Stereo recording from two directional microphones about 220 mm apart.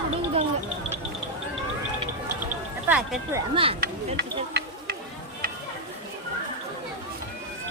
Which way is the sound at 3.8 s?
50° right (ahead or behind).